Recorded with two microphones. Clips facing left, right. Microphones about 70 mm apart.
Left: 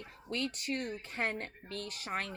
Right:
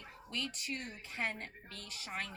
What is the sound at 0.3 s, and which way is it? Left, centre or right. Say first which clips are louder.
Speech: left 5 dB; left.